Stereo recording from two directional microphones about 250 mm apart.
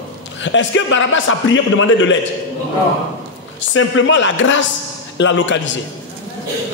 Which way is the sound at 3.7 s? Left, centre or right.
Left.